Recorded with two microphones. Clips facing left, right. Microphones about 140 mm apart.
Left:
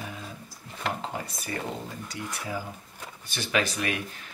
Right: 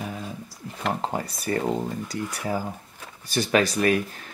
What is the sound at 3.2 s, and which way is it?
Speech, 40° right (ahead or behind).